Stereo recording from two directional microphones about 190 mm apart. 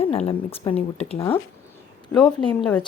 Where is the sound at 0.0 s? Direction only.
30° left (ahead or behind).